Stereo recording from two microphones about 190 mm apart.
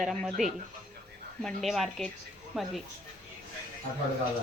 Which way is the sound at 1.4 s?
Centre (ahead or behind).